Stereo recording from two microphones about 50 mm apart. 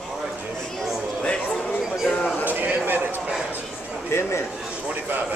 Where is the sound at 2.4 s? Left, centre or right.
Right.